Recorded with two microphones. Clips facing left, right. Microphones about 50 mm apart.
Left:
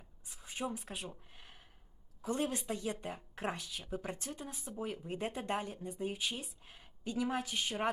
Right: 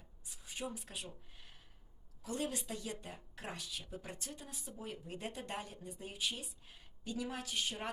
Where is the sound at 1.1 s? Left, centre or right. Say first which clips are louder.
Left 2 dB; left.